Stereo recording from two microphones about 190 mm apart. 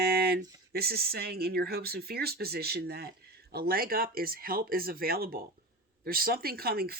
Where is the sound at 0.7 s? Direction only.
55° right (ahead or behind).